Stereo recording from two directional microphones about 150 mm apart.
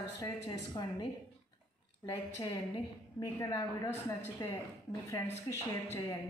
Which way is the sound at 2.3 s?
25° left (ahead or behind).